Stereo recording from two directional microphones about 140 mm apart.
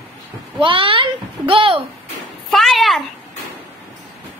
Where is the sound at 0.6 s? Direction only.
40° right (ahead or behind).